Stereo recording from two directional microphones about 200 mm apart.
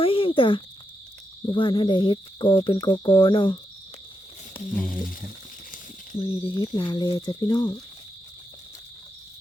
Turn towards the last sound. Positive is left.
turn(degrees=20)  # may be behind; listen again after turning